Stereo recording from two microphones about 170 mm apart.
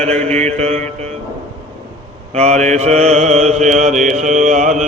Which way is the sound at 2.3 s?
40° right (ahead or behind).